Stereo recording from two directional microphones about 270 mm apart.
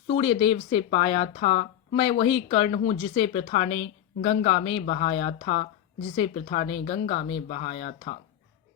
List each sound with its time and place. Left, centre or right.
0.1 s speech: left